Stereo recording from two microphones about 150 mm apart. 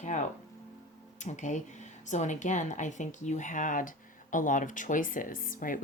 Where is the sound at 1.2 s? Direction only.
55° left (ahead or behind).